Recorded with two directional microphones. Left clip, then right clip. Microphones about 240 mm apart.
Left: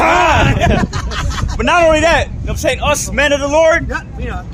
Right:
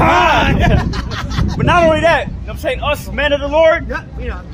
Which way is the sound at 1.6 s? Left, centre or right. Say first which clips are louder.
Left 1 dB; left.